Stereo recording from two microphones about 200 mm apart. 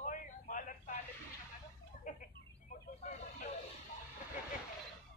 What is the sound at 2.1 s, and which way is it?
Bird, 40° left (ahead or behind).